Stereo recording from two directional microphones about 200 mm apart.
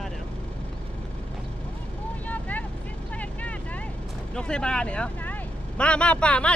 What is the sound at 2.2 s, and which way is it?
Vehicle, 10° left (ahead or behind).